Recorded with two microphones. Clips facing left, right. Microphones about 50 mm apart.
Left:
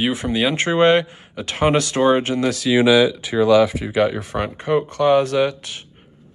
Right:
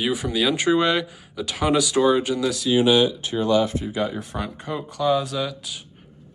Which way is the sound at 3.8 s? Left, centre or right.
Left.